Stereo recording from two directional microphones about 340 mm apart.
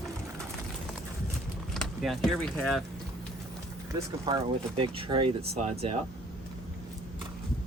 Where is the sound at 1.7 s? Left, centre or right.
Centre.